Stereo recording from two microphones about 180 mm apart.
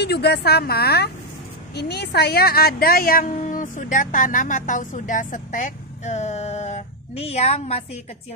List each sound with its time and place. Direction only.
0.0 s a woman's voice: 65° left (ahead or behind); by 8.0 s 35° left (ahead or behind)